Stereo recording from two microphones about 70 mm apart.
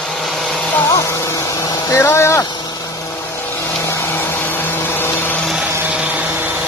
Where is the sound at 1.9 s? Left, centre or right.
Left.